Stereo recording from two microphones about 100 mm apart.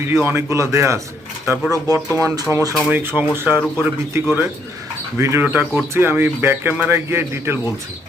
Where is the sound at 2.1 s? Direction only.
30° right (ahead or behind).